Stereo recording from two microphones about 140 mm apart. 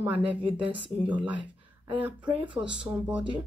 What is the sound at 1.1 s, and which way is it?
A woman's voice, 10° right (ahead or behind).